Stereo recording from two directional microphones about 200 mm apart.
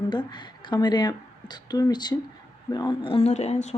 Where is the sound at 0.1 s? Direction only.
20° left (ahead or behind).